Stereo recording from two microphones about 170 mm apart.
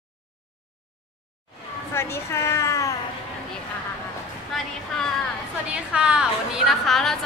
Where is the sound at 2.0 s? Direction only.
15° left (ahead or behind).